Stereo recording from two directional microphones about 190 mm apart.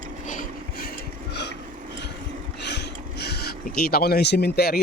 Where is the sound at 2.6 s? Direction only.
60° left (ahead or behind).